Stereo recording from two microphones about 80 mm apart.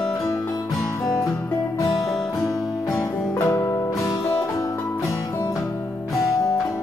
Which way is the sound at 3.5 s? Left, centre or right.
Left.